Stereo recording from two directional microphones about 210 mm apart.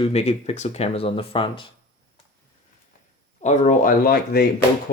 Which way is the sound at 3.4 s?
35° left (ahead or behind).